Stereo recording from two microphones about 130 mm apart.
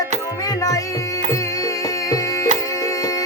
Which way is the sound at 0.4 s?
25° left (ahead or behind).